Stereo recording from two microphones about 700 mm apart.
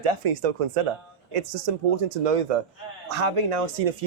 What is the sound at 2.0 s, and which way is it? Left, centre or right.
Speech, right.